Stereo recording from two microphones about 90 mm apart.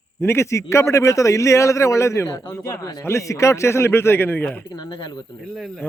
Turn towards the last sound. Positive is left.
turn(degrees=25)  # may be behind; listen again after turning